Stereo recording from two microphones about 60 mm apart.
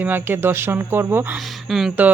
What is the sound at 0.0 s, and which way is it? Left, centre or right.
Speech, right.